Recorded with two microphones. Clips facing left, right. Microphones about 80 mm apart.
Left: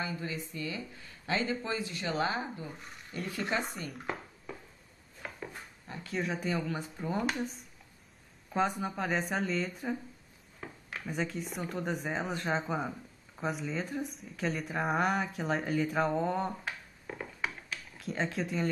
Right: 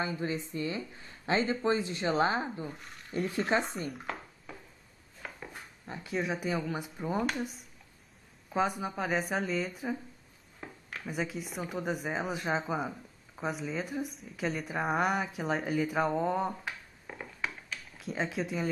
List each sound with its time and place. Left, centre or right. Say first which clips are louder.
0.0 s speech: right 4 dB; right
3.9 s a sound: left 1 dB; centre
6.1 s a woman's voice: right 1 dB; centre
8.5 s a woman's voice: even; centre
11.1 s a woman's voice: even; centre
17.9 s a woman's voice: even; centre